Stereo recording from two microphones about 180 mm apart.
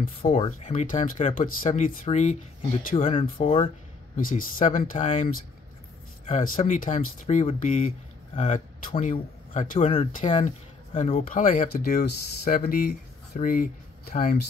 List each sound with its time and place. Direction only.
0.2 s speech: 35° left (ahead or behind)
4.2 s speech: 50° left (ahead or behind)